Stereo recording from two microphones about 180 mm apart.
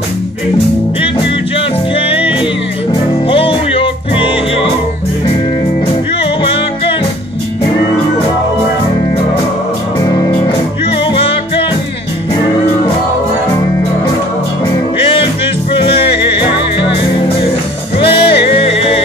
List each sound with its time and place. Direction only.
2.0 s music: 30° left (ahead or behind)
9.9 s music: 20° left (ahead or behind)
15.7 s music: 30° left (ahead or behind)
18.1 s music: 30° left (ahead or behind)